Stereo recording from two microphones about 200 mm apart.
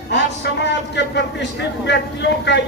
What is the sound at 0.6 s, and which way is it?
A man's voice, 60° left (ahead or behind).